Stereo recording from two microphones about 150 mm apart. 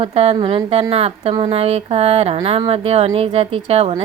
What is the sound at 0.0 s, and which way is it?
Speech, 45° right (ahead or behind).